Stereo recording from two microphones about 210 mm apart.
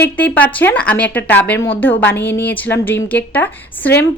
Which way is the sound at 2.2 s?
50° left (ahead or behind).